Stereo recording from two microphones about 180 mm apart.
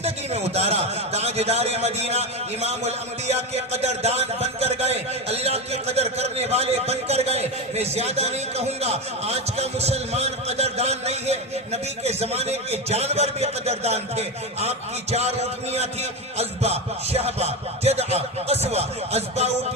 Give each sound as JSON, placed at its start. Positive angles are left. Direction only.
{"t": 0.0, "sound": "a man's voice", "side_deg": -35}
{"t": 16.4, "sound": "a man's voice", "side_deg": -35}